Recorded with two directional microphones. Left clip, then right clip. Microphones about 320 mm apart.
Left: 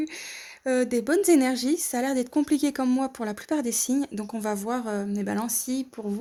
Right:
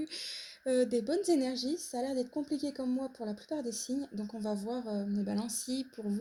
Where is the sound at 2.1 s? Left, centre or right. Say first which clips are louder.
Left 10 dB; left.